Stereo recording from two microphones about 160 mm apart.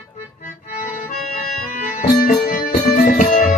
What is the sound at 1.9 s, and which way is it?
Music, 65° left (ahead or behind).